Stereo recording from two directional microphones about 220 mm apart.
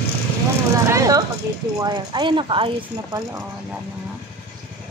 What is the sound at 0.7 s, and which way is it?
Speech, 15° right (ahead or behind).